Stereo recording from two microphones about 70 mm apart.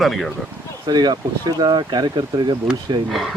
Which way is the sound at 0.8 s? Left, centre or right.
Right.